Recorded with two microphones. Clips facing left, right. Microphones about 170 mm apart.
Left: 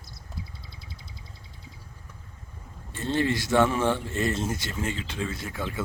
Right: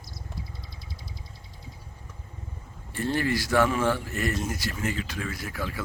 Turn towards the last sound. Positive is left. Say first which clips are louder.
# even
turn(degrees=25)  # may be behind; listen again after turning